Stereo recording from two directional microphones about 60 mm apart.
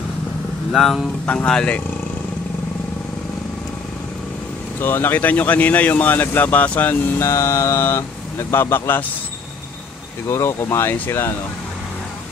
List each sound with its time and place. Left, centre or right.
0.7 s speech: centre
1.2 s speech: left
4.7 s speech: left
7.2 s speech: left
10.3 s speech: left